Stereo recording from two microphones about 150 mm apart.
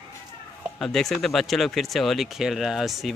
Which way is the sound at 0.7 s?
5° left (ahead or behind).